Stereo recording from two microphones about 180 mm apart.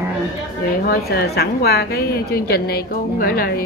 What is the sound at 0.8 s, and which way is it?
A woman's voice, 60° left (ahead or behind).